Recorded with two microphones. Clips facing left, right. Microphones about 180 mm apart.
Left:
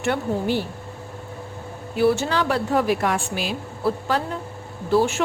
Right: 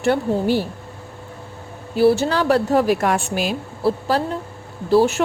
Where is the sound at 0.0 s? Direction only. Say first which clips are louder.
Right 5 dB; 35° right (ahead or behind).